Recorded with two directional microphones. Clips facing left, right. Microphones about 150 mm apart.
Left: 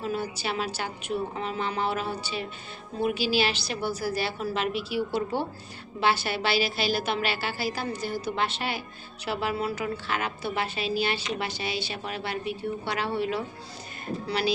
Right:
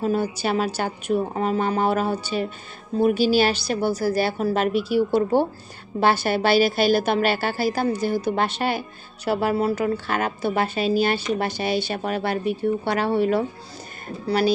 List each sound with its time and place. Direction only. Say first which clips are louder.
0.0 s a woman's voice: right 8 dB; 45° right (ahead or behind)